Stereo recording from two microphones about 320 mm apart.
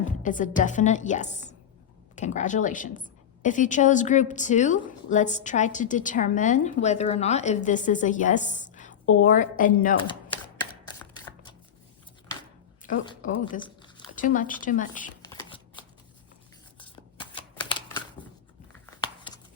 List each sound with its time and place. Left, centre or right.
0.0 s a woman's voice: left
10.1 s a sound: centre
12.8 s a sound: centre
14.3 s a woman's voice: left
15.2 s shuffling cards: centre
18.9 s crumpling: centre